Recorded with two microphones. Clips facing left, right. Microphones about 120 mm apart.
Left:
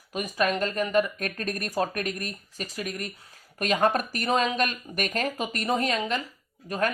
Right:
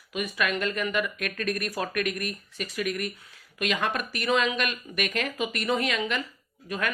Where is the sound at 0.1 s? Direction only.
35° left (ahead or behind).